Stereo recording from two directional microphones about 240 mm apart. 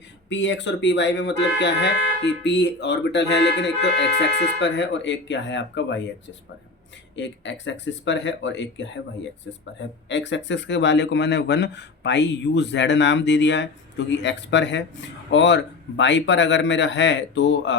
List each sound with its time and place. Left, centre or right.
0.3 s speech: left
7.2 s speech: left
10.1 s speech: left